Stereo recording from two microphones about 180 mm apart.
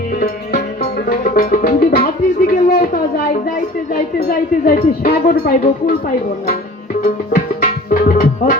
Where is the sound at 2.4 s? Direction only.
50° left (ahead or behind).